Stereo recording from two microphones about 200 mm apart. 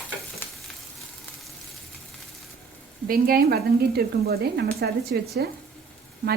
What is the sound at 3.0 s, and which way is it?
Frying, 45° right (ahead or behind).